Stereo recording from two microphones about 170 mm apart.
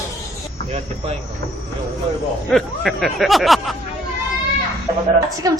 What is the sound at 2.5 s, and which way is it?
Speech, centre (ahead or behind).